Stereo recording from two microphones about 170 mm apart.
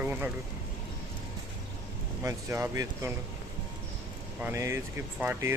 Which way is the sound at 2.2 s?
15° right (ahead or behind).